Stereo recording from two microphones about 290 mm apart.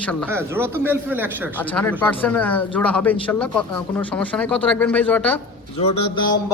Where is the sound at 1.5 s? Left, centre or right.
Centre.